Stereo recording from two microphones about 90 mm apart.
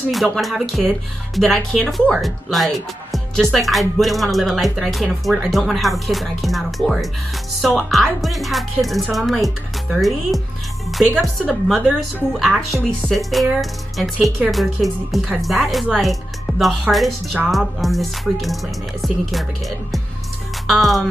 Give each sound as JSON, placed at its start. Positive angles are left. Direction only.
{"t": 0.4, "sound": "speech", "side_deg": 0}
{"t": 12.4, "sound": "speech", "side_deg": 10}
{"t": 20.6, "sound": "music", "side_deg": 0}